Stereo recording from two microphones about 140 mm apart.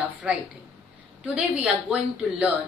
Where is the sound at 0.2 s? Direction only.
10° right (ahead or behind).